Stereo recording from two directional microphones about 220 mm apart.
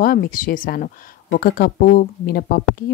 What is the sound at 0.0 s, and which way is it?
Speech, 40° left (ahead or behind).